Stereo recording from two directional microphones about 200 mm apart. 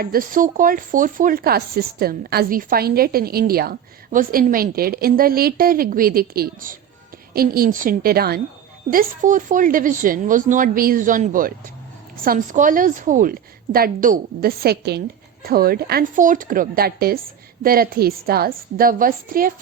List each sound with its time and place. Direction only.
0.0 s speech: 45° right (ahead or behind)